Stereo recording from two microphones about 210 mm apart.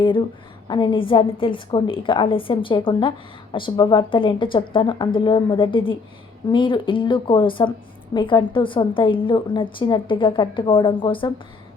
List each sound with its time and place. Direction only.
0.0 s a woman's voice: 25° left (ahead or behind)